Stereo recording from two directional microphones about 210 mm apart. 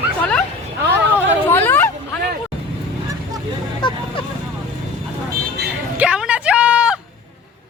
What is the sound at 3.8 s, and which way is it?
Speech, 20° left (ahead or behind).